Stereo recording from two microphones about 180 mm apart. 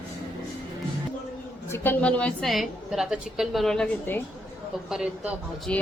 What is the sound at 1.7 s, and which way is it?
A woman's voice, 10° left (ahead or behind).